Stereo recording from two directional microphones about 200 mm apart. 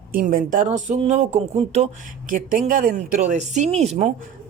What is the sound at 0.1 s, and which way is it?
Speech, 45° right (ahead or behind).